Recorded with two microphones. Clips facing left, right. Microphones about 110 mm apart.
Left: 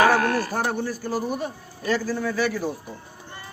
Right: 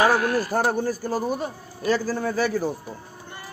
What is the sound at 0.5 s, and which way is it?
A man's voice, 45° right (ahead or behind).